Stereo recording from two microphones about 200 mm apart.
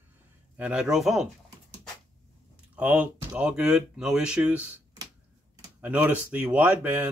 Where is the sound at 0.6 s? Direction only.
5° right (ahead or behind).